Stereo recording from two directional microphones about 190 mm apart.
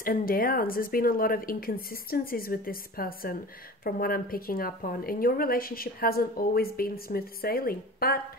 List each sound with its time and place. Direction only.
0.0 s a woman's voice: 50° left (ahead or behind)